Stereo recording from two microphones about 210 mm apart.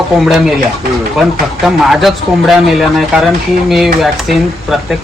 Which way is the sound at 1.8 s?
Centre (ahead or behind).